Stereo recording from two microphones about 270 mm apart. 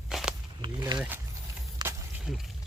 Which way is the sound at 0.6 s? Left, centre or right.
Centre.